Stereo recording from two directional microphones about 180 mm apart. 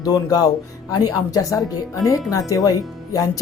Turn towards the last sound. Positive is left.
turn(degrees=20)  # may be behind; listen again after turning